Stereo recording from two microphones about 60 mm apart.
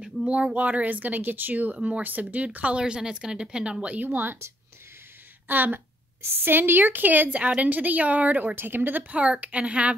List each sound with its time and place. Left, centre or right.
0.0 s speech: centre; by 4.5 s right
5.5 s speech: right
9.1 s speech: right